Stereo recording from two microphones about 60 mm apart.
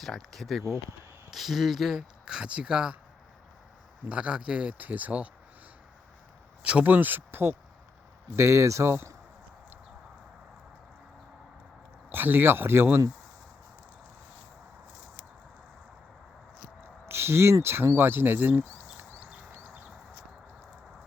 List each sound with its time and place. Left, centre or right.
0.0 s speech: centre
2.2 s speech: centre
4.1 s speech: centre
6.6 s speech: centre
6.8 s speech: right
8.4 s speech: right
12.1 s speech: right
17.1 s speech: right